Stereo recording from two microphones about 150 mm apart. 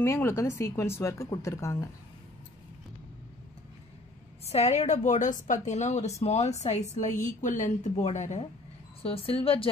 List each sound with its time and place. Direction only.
0.0 s speech: 15° left (ahead or behind)
4.5 s a woman's voice: 50° left (ahead or behind)